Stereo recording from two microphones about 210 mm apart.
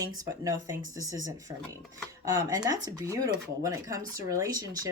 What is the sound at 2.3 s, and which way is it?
Speech, 15° right (ahead or behind).